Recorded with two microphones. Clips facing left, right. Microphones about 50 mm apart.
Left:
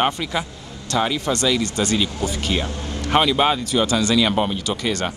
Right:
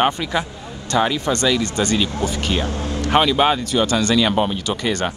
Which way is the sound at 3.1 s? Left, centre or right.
Centre.